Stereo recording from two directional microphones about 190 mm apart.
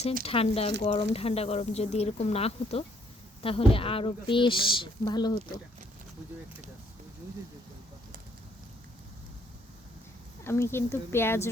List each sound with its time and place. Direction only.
0.3 s speech: 30° left (ahead or behind)
10.4 s speech: 15° left (ahead or behind)